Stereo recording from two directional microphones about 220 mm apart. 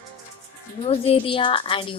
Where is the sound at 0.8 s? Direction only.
25° left (ahead or behind).